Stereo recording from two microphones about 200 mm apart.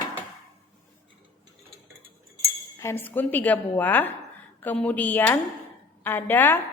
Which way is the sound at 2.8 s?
10° left (ahead or behind).